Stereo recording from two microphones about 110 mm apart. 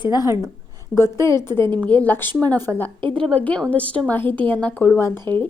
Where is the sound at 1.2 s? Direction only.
25° left (ahead or behind).